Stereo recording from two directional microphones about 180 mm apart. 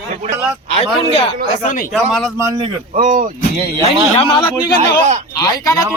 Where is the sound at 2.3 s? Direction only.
15° right (ahead or behind).